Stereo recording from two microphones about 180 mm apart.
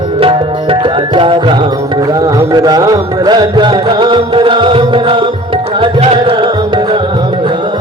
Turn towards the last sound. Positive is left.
turn(degrees=-25)  # may be behind; listen again after turning